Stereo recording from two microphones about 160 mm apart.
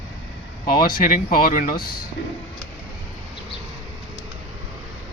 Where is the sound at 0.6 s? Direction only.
65° left (ahead or behind).